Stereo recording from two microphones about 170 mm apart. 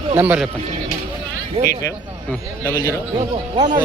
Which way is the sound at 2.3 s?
10° left (ahead or behind).